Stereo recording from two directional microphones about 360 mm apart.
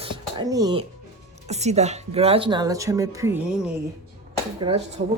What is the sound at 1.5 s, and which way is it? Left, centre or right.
Speech, centre.